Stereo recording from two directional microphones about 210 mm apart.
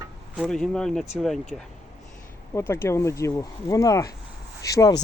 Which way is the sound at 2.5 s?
10° left (ahead or behind).